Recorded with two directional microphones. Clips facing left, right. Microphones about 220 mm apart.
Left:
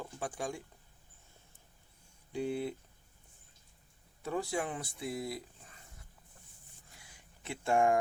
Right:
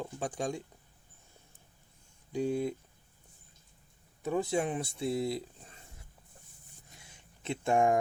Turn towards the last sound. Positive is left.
turn(degrees=-20)  # may be behind; listen again after turning